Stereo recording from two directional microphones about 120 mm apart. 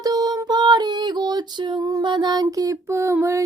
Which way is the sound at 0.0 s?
35° right (ahead or behind).